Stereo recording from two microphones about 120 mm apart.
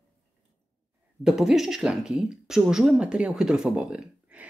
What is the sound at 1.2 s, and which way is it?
Speech, 5° right (ahead or behind).